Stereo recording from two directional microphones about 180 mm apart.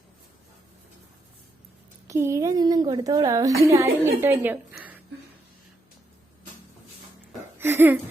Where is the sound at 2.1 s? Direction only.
15° right (ahead or behind).